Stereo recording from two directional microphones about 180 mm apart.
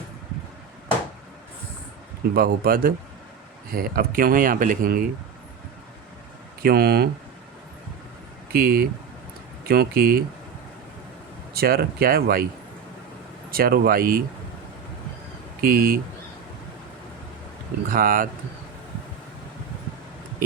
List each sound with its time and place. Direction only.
2.3 s speech: 55° right (ahead or behind)
6.6 s speech: 55° right (ahead or behind)
8.5 s speech: 55° right (ahead or behind)
11.5 s speech: 60° right (ahead or behind)
13.5 s speech: 55° right (ahead or behind)
15.6 s speech: 55° right (ahead or behind)
17.8 s speech: 50° right (ahead or behind)